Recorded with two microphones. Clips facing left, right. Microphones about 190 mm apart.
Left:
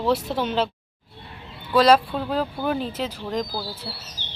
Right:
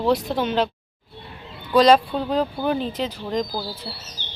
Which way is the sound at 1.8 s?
5° left (ahead or behind).